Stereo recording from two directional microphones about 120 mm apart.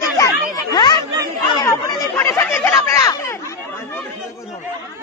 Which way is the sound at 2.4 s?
15° left (ahead or behind).